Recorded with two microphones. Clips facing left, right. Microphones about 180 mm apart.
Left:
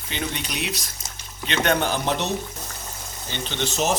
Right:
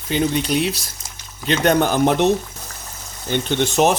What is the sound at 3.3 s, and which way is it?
Speech, 55° right (ahead or behind).